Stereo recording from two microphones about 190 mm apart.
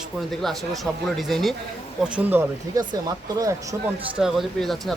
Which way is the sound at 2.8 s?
20° right (ahead or behind).